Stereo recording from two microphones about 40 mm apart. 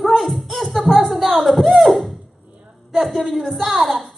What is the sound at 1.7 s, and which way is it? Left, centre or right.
Music, centre.